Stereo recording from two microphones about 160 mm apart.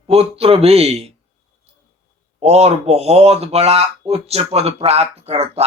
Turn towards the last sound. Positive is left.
turn(degrees=-40)  # may be behind; listen again after turning